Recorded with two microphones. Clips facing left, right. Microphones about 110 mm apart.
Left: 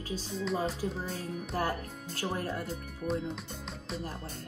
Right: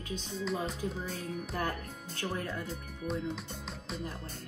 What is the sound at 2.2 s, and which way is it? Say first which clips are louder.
Speech: left 2 dB; 30° left (ahead or behind).